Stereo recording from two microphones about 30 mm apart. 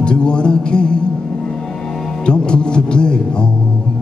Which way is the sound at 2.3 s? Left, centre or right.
Left.